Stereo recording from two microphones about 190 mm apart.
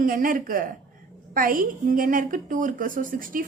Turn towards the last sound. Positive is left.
turn(degrees=-45)  # may be behind; listen again after turning